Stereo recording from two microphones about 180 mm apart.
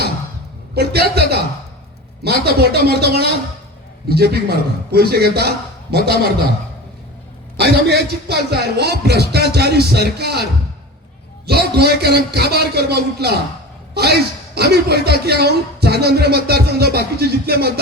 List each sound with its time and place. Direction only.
0.8 s a man's voice: 60° right (ahead or behind)
7.5 s a man's voice: 65° right (ahead or behind)
11.4 s a man's voice: 65° right (ahead or behind)